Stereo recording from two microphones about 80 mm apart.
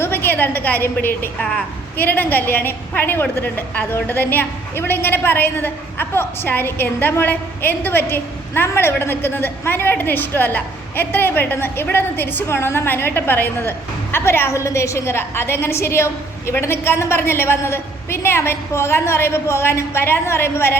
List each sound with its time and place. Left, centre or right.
0.0 s a woman's voice: left